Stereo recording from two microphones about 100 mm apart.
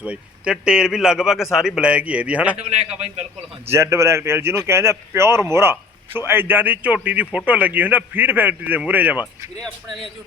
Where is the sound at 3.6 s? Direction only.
25° right (ahead or behind).